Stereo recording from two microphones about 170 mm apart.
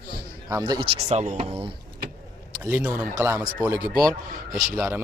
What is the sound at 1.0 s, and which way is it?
Speech, 40° right (ahead or behind).